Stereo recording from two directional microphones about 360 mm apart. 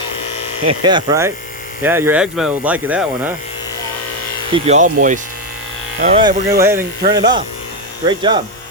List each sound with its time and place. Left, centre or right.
0.7 s speech: centre
4.5 s speech: centre